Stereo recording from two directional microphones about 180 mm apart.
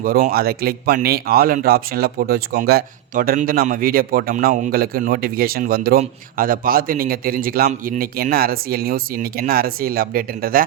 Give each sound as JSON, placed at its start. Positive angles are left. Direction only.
{"t": 0.0, "sound": "a man's voice", "side_deg": -55}